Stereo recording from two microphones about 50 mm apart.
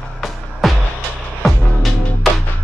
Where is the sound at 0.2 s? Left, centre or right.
Centre.